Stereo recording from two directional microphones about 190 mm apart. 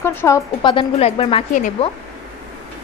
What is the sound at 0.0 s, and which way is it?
Speech, 10° left (ahead or behind).